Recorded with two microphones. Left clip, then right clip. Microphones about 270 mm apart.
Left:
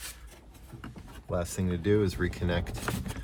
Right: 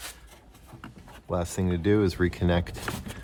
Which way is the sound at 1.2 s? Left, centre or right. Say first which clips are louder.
Right 3 dB; right.